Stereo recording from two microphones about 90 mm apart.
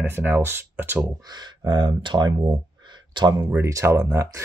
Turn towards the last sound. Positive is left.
turn(degrees=-30)  # may be behind; listen again after turning